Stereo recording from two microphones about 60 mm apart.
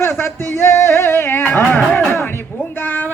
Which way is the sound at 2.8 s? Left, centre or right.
Left.